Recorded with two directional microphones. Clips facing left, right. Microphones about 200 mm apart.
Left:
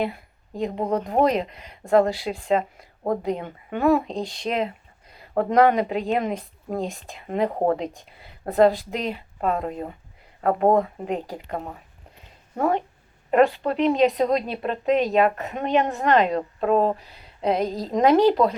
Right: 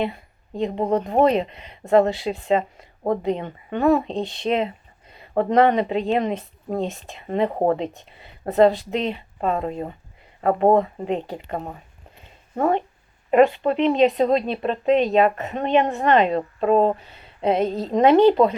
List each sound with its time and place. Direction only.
0.0 s speech: centre (ahead or behind)
12.5 s speech: centre (ahead or behind)
17.6 s a woman's voice: 30° right (ahead or behind)
17.9 s speech: centre (ahead or behind)